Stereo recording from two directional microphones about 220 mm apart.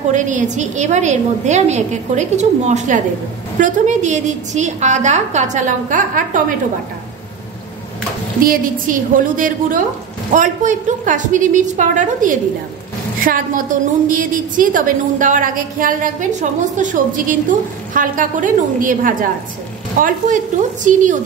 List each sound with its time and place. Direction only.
0.1 s a woman's voice: 35° right (ahead or behind)
8.4 s a woman's voice: 40° right (ahead or behind)